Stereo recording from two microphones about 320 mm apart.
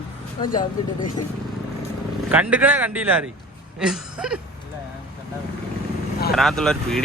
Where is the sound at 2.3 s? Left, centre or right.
Centre.